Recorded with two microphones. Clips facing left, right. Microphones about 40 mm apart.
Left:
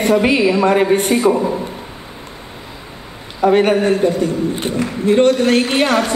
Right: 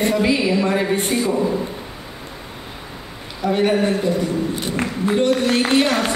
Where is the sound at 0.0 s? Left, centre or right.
Left.